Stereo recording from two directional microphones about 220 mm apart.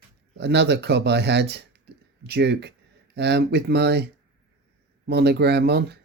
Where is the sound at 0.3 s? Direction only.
50° right (ahead or behind).